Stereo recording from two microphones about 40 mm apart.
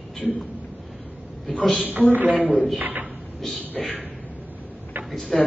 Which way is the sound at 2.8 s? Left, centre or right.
Right.